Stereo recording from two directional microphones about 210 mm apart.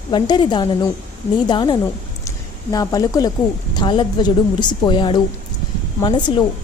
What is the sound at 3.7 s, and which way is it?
A woman's voice, 20° left (ahead or behind).